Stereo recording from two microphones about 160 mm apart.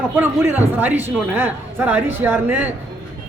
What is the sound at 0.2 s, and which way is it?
Speech, 10° right (ahead or behind).